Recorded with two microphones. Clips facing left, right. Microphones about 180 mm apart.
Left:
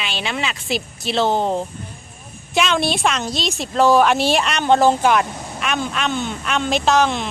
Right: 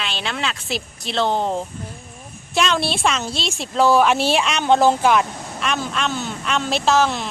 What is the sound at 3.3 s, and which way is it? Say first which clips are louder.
Speech: left 3 dB; 40° left (ahead or behind).